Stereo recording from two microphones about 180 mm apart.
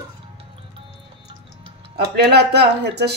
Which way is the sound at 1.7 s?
65° right (ahead or behind).